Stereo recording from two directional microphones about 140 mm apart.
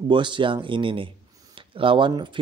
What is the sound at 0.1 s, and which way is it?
A man's voice, 35° right (ahead or behind).